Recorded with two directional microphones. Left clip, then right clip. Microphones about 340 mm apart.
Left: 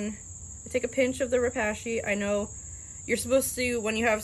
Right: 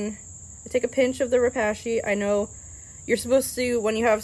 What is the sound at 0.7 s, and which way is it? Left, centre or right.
Speech, right.